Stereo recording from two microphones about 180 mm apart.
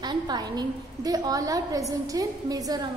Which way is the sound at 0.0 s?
25° right (ahead or behind).